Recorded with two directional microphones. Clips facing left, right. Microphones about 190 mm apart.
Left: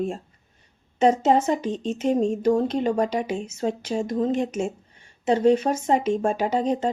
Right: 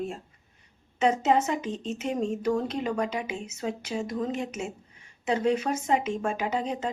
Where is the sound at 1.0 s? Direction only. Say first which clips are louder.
Left 5 dB; 35° left (ahead or behind).